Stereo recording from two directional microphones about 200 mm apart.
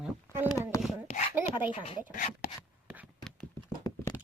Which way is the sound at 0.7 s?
15° left (ahead or behind).